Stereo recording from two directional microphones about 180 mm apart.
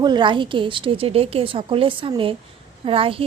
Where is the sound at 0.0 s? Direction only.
25° right (ahead or behind).